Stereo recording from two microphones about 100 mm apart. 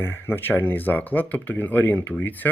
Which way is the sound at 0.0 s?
20° left (ahead or behind).